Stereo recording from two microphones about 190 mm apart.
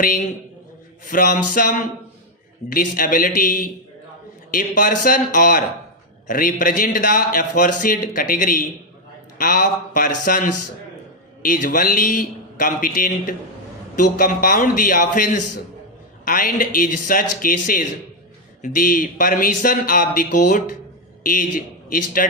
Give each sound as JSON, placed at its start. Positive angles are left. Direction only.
{"t": 1.0, "sound": "a man's voice", "side_deg": 45}
{"t": 21.8, "sound": "speech", "side_deg": 45}